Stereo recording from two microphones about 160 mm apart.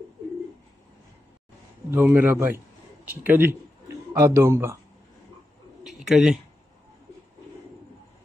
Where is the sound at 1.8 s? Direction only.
15° right (ahead or behind).